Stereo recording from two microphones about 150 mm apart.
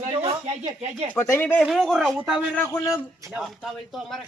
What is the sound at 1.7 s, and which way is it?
Speech, centre (ahead or behind).